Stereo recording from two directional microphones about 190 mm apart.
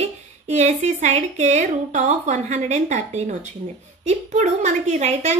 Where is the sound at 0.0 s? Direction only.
35° right (ahead or behind).